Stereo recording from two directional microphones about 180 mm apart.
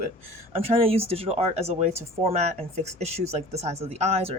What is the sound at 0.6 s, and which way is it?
Speech, 35° right (ahead or behind).